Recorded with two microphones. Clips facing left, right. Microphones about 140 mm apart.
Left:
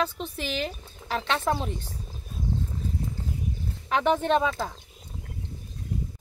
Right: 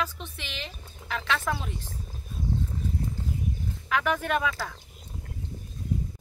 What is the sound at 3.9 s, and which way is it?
Speech, 30° left (ahead or behind).